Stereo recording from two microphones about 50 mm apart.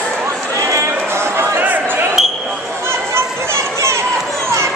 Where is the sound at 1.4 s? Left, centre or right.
Right.